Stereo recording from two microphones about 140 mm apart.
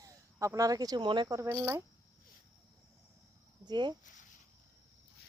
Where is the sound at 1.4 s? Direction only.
20° right (ahead or behind).